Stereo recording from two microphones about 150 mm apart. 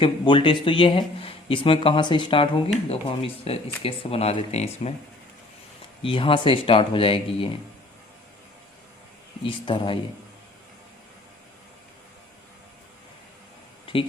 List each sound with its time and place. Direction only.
0.0 s speech: 35° left (ahead or behind)
6.0 s speech: 35° left (ahead or behind)
9.4 s speech: 35° left (ahead or behind)